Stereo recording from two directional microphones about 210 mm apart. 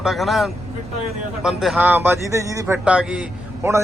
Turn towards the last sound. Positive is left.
turn(degrees=-10)  # may be behind; listen again after turning